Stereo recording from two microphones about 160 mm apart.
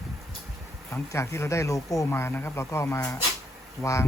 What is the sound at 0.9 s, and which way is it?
Speech, 15° left (ahead or behind).